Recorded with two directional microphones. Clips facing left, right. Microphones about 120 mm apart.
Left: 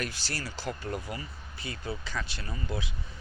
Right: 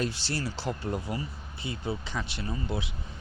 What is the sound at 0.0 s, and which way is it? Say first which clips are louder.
Speech: right 5 dB; 25° right (ahead or behind).